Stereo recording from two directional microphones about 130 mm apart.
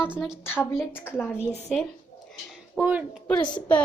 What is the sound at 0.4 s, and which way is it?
A woman's voice, 15° left (ahead or behind).